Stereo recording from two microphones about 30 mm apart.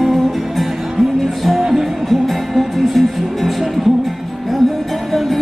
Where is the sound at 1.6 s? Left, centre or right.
Centre.